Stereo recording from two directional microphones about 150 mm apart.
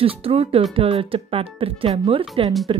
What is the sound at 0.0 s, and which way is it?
Speech, 40° right (ahead or behind).